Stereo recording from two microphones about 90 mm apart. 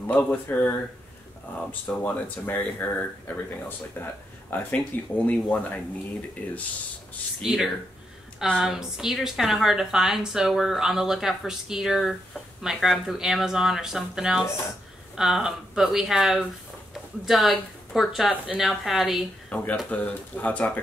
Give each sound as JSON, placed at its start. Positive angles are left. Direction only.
{"t": 0.0, "sound": "speech", "side_deg": 15}
{"t": 4.7, "sound": "speech", "side_deg": 10}
{"t": 7.4, "sound": "a woman's voice", "side_deg": -5}
{"t": 19.5, "sound": "speech", "side_deg": 15}